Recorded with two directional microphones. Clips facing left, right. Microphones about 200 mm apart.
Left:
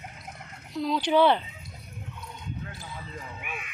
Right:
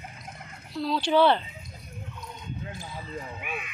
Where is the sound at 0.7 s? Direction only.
15° left (ahead or behind).